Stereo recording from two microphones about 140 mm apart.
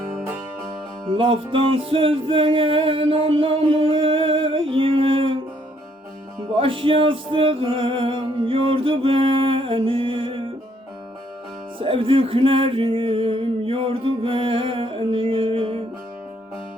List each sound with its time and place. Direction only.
1.1 s music: 40° right (ahead or behind)
6.5 s music: 40° right (ahead or behind)
11.8 s music: 40° right (ahead or behind)